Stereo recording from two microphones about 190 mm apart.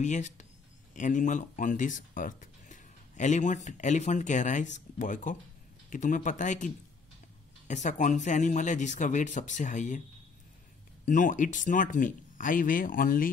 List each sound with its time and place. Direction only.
0.0 s speech: 40° left (ahead or behind)
11.1 s speech: 40° left (ahead or behind)